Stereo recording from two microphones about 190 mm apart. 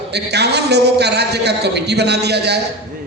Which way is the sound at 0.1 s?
60° right (ahead or behind).